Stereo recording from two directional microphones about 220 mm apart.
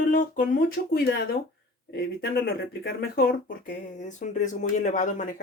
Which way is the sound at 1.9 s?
45° left (ahead or behind).